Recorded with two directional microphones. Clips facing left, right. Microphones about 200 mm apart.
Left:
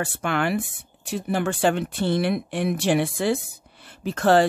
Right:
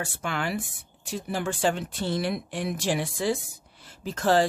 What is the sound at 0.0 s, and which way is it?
Speech, 65° left (ahead or behind).